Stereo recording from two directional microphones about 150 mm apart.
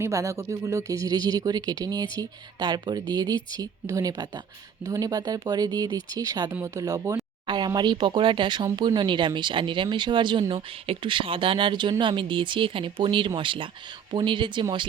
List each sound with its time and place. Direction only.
0.0 s speech: 20° right (ahead or behind)